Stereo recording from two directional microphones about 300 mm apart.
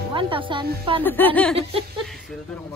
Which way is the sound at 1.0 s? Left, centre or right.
Centre.